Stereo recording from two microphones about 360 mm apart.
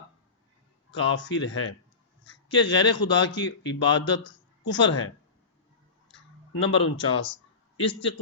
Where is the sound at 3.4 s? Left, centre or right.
Left.